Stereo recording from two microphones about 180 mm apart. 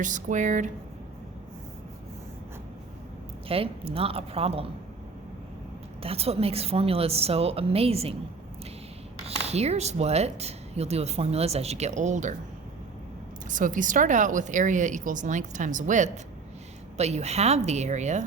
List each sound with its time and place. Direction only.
0.0 s a woman's voice: 45° right (ahead or behind)
3.5 s speech: 30° right (ahead or behind)
6.0 s speech: 35° right (ahead or behind)
9.2 s speech: 35° right (ahead or behind)
13.5 s a woman's voice: 45° right (ahead or behind)